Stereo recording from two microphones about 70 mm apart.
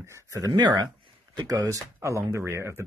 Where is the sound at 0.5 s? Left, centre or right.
Right.